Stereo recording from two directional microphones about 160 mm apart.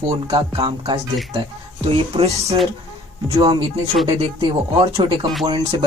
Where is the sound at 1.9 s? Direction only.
40° right (ahead or behind).